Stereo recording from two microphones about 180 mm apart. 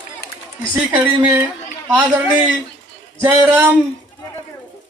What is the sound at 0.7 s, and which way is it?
Speech, 10° right (ahead or behind).